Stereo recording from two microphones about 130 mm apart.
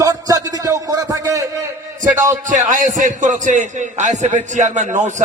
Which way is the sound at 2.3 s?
75° right (ahead or behind).